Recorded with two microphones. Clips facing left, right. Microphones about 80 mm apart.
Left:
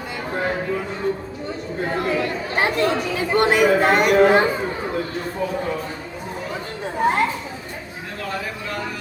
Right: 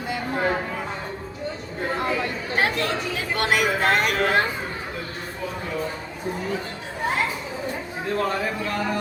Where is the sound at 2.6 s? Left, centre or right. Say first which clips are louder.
Left 4 dB; centre.